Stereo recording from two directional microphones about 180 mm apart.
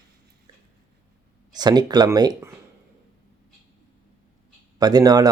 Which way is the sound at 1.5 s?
20° right (ahead or behind).